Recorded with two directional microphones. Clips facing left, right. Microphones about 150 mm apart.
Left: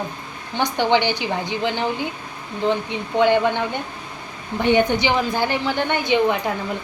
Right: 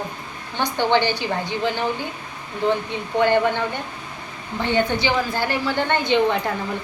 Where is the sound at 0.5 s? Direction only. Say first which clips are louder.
Left 1 dB; 15° left (ahead or behind).